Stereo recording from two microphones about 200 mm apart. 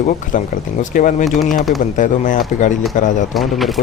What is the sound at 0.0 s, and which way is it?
Speech, 40° left (ahead or behind).